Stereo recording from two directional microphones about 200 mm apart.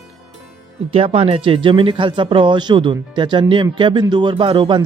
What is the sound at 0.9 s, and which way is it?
Speech, 30° right (ahead or behind).